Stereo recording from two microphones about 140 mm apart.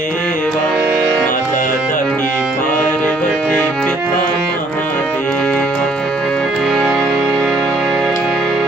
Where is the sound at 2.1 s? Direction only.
5° left (ahead or behind).